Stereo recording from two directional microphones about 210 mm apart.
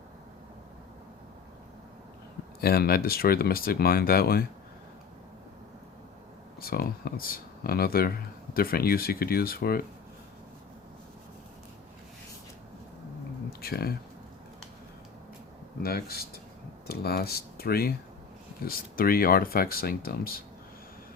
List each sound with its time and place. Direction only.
2.6 s speech: 45° left (ahead or behind)
6.6 s speech: 45° left (ahead or behind)
13.6 s speech: 45° left (ahead or behind)
15.8 s speech: 45° left (ahead or behind)